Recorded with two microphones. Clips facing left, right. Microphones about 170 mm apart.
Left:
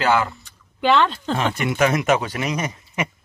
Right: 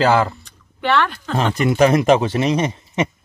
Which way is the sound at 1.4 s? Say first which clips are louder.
Right 6 dB; 35° right (ahead or behind).